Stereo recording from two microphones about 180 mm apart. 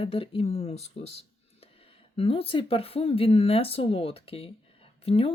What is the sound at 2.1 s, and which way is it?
Speech, 30° left (ahead or behind).